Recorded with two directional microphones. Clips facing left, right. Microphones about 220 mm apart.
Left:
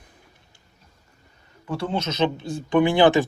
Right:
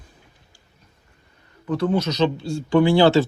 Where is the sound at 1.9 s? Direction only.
25° left (ahead or behind).